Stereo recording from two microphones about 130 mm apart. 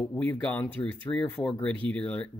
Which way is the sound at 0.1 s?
15° left (ahead or behind).